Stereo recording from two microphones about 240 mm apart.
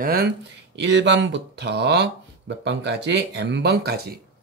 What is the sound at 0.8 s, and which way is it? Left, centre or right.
Speech, right.